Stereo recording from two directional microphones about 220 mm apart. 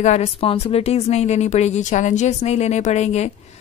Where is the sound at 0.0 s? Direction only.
30° left (ahead or behind).